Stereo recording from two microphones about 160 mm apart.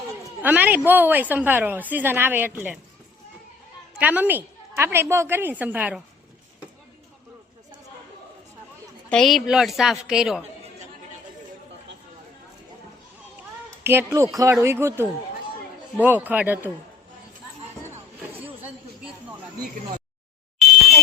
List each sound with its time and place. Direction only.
0.4 s a woman's voice: 10° right (ahead or behind)
3.9 s a woman's voice: 10° right (ahead or behind)
9.0 s a woman's voice: 5° left (ahead or behind)
13.8 s a woman's voice: 15° right (ahead or behind)